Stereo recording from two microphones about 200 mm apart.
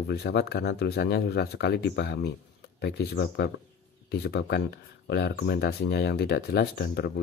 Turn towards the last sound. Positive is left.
turn(degrees=55)  # may be behind; listen again after turning